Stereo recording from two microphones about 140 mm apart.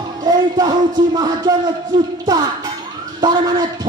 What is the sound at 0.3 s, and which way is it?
Speech, 30° right (ahead or behind).